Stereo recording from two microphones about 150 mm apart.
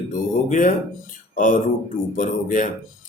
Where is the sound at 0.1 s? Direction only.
60° left (ahead or behind).